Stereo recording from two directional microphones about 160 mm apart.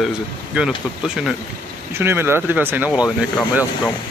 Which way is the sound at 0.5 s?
5° right (ahead or behind).